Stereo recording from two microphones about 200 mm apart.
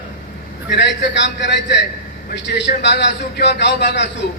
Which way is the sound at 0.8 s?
60° left (ahead or behind).